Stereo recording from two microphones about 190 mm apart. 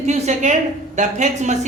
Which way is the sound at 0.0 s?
40° right (ahead or behind).